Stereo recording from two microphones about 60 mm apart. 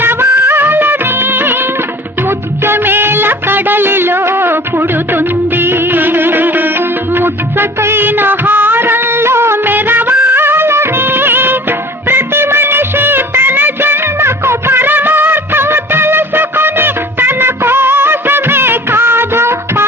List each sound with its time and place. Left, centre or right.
0.0 s music of bollywood: right
2.6 s music of bollywood: right
12.0 s music: right